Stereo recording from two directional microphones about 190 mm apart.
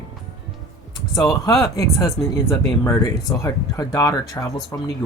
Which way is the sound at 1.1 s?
20° left (ahead or behind).